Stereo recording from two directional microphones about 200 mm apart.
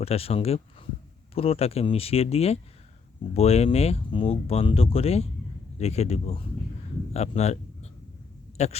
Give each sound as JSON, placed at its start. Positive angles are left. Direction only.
{"t": 0.0, "sound": "speech", "side_deg": 30}